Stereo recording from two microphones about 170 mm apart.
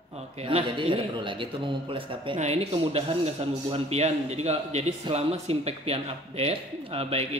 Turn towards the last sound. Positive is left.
turn(degrees=-35)  # may be behind; listen again after turning